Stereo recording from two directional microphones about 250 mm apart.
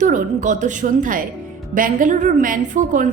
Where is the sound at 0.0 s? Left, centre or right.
Right.